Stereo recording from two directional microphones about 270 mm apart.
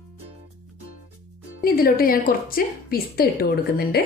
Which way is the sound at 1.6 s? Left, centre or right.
Left.